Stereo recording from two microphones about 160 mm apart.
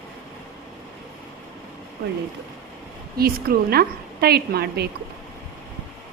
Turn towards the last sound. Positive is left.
turn(degrees=-80)